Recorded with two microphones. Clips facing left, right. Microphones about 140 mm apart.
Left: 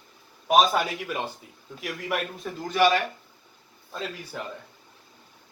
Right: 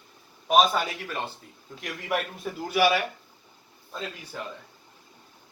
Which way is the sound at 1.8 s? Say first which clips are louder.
Even; centre (ahead or behind).